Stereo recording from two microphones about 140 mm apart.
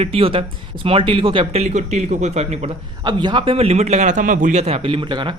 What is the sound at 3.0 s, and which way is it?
A man's voice, 30° right (ahead or behind).